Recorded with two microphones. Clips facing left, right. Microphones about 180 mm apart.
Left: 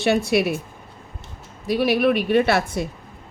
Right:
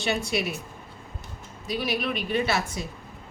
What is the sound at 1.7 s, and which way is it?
A woman's voice, 60° left (ahead or behind).